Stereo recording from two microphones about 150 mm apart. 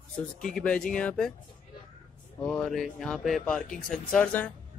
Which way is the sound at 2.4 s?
5° left (ahead or behind).